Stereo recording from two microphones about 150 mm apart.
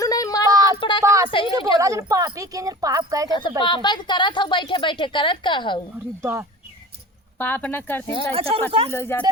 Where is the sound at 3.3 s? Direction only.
30° left (ahead or behind).